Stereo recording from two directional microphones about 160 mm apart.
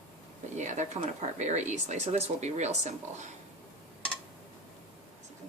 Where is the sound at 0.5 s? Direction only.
50° right (ahead or behind).